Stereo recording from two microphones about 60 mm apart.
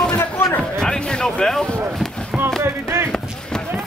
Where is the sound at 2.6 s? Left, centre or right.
Right.